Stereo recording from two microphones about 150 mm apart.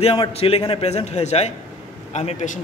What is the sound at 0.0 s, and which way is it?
A man's voice, 40° left (ahead or behind).